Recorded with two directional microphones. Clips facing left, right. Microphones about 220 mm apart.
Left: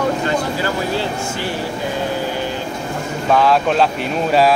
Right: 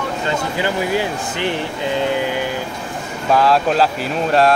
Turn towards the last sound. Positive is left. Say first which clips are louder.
# even
turn(degrees=0)  # may be behind; listen again after turning